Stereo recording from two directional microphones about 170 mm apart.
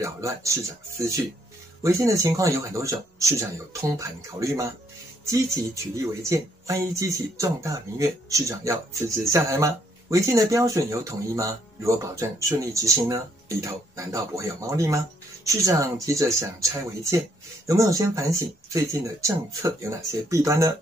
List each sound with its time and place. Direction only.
0.0 s speech: 20° right (ahead or behind)